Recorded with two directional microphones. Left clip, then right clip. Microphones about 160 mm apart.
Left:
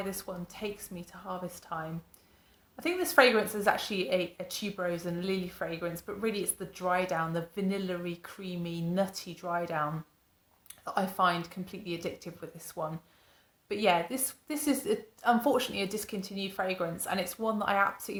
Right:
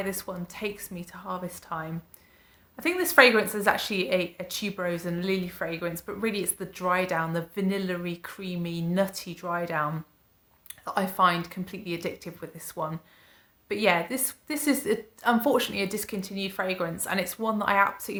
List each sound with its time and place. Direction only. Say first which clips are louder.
0.0 s a woman's voice: right 5 dB; 20° right (ahead or behind)